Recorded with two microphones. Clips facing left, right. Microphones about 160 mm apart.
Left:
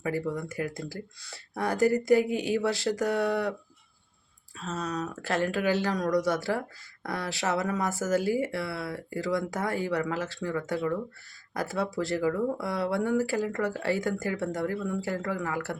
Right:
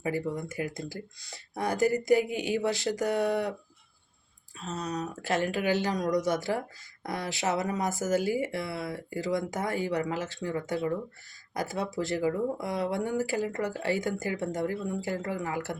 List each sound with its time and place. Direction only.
0.3 s speech: 20° right (ahead or behind)
4.6 s speech: 15° right (ahead or behind)